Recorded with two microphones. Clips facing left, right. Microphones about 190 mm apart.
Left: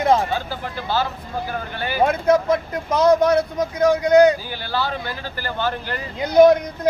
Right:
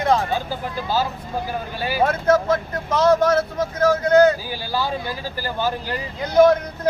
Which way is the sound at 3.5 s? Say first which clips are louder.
Left 1 dB; 15° left (ahead or behind).